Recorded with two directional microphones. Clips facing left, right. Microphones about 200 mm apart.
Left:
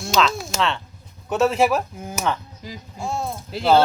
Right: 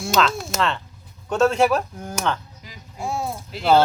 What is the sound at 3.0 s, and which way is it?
Speech, 10° right (ahead or behind).